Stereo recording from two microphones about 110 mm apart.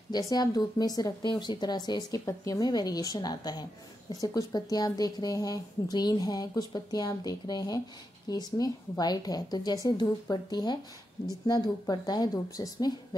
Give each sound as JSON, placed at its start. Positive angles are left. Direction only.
{"t": 0.1, "sound": "speech", "side_deg": 35}